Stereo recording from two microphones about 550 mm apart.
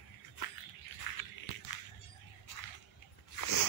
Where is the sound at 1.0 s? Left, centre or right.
Left.